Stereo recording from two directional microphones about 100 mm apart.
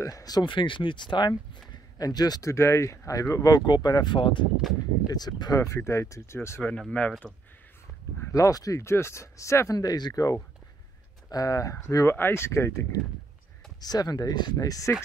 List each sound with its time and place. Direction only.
0.0 s speech: 40° left (ahead or behind)
0.4 s speech: 55° left (ahead or behind)
2.5 s speech: 30° left (ahead or behind); by 4.5 s 55° left (ahead or behind)
5.0 s speech: 40° left (ahead or behind)
6.8 s speech: 10° left (ahead or behind)
8.2 s speech: 35° left (ahead or behind)
13.7 s speech: 40° left (ahead or behind)